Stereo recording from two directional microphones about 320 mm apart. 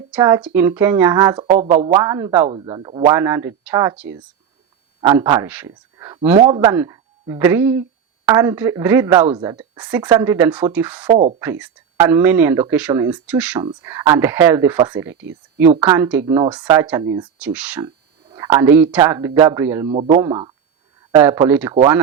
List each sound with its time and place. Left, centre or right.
0.1 s speech: centre
11.1 s speech: centre
11.6 s speech: centre